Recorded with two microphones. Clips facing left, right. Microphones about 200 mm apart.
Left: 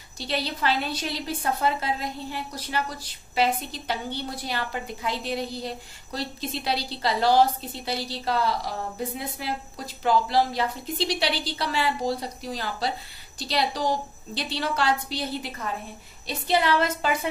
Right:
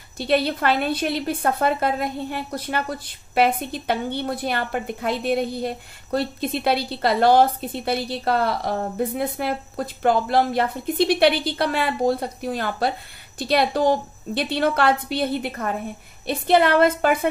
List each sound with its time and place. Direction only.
0.2 s a woman's voice: 55° right (ahead or behind)